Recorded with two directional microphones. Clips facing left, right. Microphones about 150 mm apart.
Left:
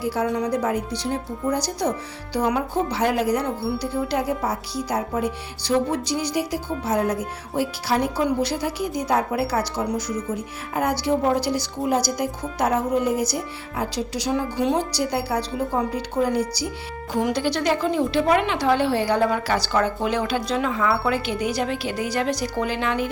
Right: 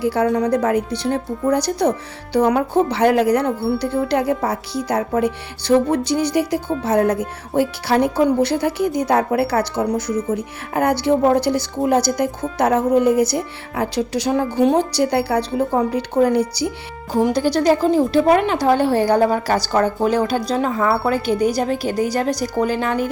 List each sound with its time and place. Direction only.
0.0 s speech: 60° right (ahead or behind)
17.1 s a woman's voice: 35° right (ahead or behind)